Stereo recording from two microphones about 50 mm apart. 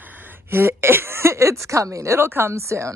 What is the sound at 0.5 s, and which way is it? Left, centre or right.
Speech, right.